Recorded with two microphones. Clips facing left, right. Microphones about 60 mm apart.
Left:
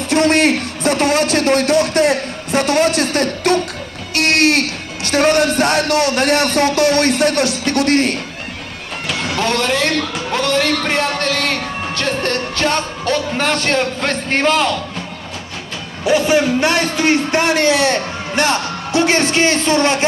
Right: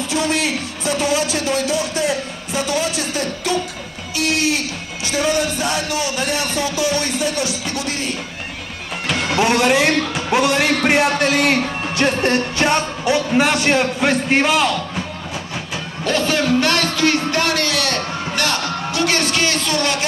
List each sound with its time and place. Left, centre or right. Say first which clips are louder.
0.1 s speech: left 8 dB; left
9.0 s a sound: right 2 dB; centre
10.1 s a man's voice: right 1 dB; centre
16.0 s a man's voice: left 5 dB; centre